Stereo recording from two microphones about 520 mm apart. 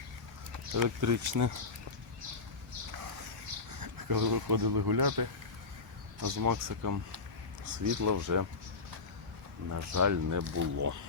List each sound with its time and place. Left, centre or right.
0.7 s speech: right
3.7 s speech: right
9.6 s speech: right